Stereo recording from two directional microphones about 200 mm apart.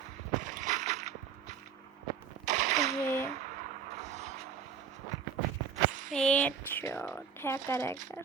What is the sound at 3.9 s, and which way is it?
Music, 35° right (ahead or behind).